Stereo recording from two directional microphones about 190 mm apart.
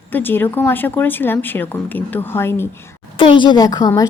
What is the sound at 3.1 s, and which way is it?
Speech, 25° left (ahead or behind).